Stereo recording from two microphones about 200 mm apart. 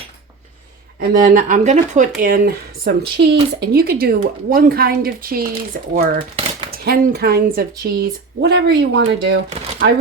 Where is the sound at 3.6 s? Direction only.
50° right (ahead or behind).